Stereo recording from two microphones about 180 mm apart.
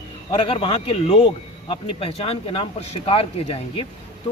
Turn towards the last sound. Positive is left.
turn(degrees=30)  # may be behind; listen again after turning